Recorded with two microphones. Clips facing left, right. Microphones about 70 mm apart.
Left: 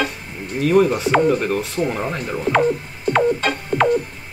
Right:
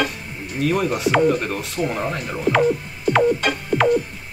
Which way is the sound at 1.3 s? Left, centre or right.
Centre.